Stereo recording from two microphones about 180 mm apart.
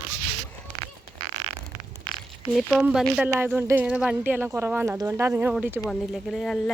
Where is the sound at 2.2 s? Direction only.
Centre (ahead or behind).